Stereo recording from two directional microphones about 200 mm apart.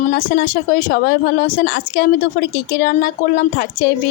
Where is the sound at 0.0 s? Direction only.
45° left (ahead or behind).